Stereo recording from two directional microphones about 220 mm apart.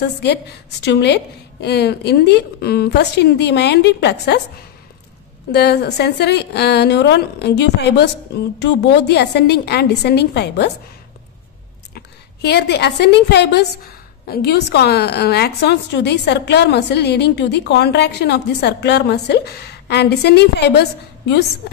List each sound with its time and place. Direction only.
0.8 s a woman's voice: 50° left (ahead or behind)
5.5 s a woman's voice: 45° left (ahead or behind)
11.9 s a woman's voice: 45° left (ahead or behind)